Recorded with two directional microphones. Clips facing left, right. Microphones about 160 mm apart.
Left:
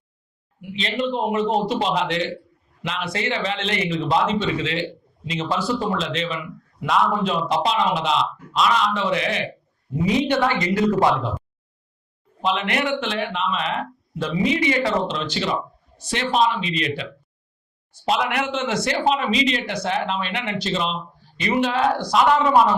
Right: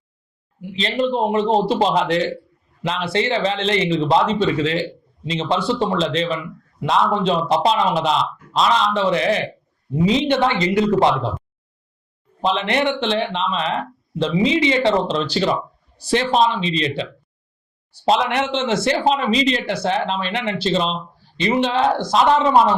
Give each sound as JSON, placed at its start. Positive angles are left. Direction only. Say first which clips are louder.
{"t": 0.8, "sound": "a man's voice", "louder": "right 4 dB", "side_deg": -35}
{"t": 10.1, "sound": "speech", "louder": "right 2 dB", "side_deg": -25}
{"t": 12.4, "sound": "a man's voice", "louder": "right 3 dB", "side_deg": -30}
{"t": 15.1, "sound": "a man's voice", "louder": "right 5 dB", "side_deg": -35}